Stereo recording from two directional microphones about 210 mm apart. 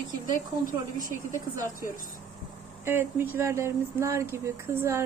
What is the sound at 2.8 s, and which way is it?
Speech, 10° right (ahead or behind).